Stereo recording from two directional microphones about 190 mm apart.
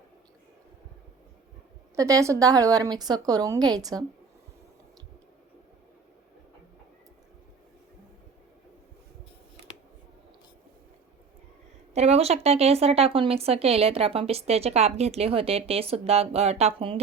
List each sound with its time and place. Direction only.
2.0 s a woman's voice: 15° right (ahead or behind)
11.9 s speech: 35° right (ahead or behind)